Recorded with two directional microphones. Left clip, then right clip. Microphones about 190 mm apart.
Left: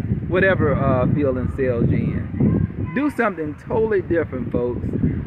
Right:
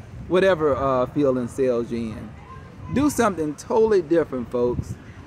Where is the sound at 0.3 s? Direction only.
20° right (ahead or behind).